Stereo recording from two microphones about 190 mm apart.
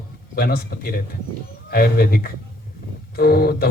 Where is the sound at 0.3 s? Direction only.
55° left (ahead or behind).